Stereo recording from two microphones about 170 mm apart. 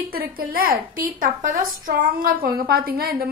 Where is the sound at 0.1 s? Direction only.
60° right (ahead or behind).